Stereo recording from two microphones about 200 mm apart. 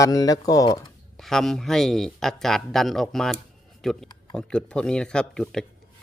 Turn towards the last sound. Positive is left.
turn(degrees=5)  # may be behind; listen again after turning